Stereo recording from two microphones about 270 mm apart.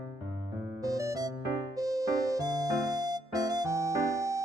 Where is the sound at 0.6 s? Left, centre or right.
Centre.